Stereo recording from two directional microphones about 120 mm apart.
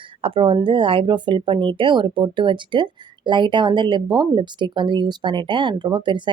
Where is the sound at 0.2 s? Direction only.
50° right (ahead or behind).